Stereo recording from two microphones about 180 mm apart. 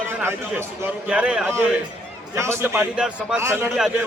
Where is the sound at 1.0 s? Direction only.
5° right (ahead or behind).